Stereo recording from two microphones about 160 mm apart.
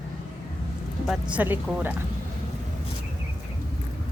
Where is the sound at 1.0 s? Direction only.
5° right (ahead or behind).